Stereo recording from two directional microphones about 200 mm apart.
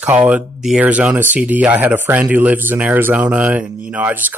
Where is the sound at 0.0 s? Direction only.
5° right (ahead or behind).